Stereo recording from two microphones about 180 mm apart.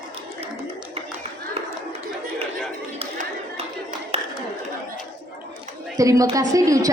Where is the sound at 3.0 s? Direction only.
35° right (ahead or behind).